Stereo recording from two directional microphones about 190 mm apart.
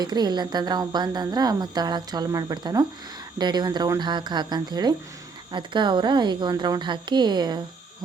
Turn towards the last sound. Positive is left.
turn(degrees=-20)  # may be behind; listen again after turning